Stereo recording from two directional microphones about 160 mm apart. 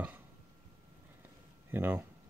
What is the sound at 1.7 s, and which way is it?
Speech, 15° right (ahead or behind).